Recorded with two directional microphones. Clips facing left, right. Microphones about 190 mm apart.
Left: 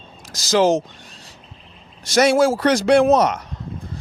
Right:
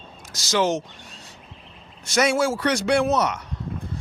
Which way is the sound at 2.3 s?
35° left (ahead or behind).